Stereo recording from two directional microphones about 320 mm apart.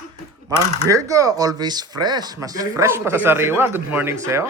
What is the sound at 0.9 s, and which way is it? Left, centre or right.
Speech, centre.